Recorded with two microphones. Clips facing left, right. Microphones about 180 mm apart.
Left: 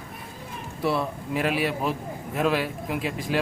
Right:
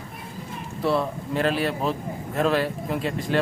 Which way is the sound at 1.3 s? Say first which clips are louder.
Right 2 dB; 5° left (ahead or behind).